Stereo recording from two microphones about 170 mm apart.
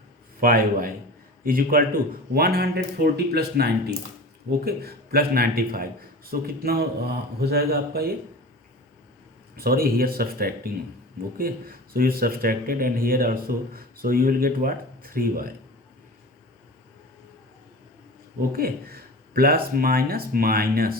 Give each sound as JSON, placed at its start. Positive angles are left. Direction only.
{"t": 0.3, "sound": "speech", "side_deg": -55}
{"t": 9.6, "sound": "speech", "side_deg": -60}
{"t": 18.5, "sound": "speech", "side_deg": -60}